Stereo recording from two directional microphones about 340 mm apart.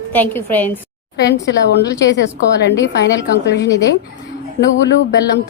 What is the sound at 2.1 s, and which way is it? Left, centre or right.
A woman's voice, left.